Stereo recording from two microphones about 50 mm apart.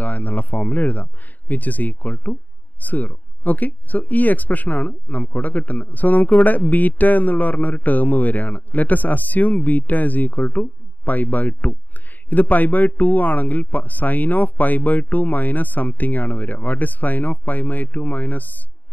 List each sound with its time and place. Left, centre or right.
0.0 s speech: left